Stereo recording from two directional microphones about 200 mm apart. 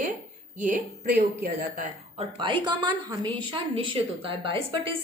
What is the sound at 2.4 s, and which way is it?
A woman's voice, 25° right (ahead or behind).